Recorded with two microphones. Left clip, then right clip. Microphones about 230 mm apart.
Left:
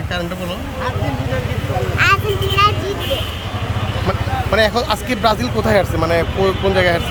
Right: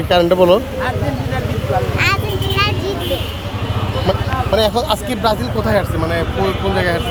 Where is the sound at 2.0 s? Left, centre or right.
Centre.